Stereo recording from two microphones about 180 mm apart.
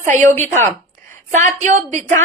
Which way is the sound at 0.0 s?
45° right (ahead or behind).